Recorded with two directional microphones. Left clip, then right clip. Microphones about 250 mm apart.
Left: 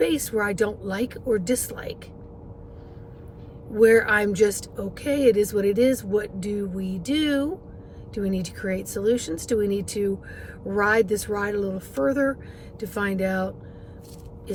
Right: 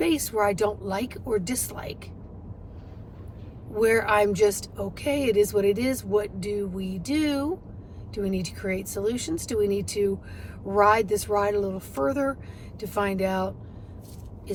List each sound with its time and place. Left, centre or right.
0.0 s a woman's voice: centre
3.8 s a woman's voice: centre
10.7 s a woman's voice: centre